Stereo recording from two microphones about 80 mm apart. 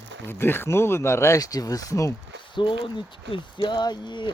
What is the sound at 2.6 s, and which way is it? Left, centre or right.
Speech, left.